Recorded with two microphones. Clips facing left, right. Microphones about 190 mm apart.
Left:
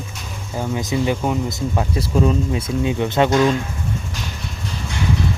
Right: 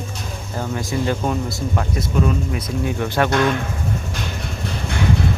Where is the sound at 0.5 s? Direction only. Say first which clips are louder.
Left 2 dB; 15° left (ahead or behind).